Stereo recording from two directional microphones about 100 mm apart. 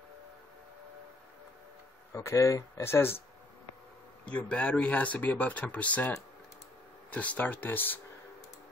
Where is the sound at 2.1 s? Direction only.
30° left (ahead or behind).